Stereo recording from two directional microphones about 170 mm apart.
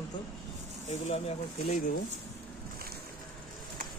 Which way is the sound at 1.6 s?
55° left (ahead or behind).